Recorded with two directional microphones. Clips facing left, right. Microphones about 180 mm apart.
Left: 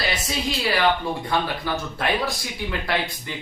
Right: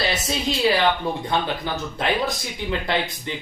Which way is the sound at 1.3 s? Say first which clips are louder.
Left 2 dB; 20° right (ahead or behind).